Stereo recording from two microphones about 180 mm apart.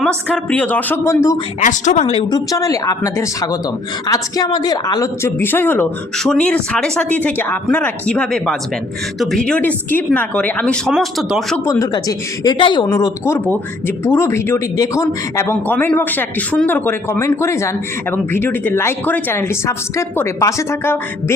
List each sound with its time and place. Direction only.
0.5 s speech: 10° left (ahead or behind)
1.6 s a woman's voice: 40° left (ahead or behind)
2.3 s a woman's voice: 20° left (ahead or behind); by 11.6 s centre (ahead or behind)
11.6 s a woman's voice: 20° left (ahead or behind)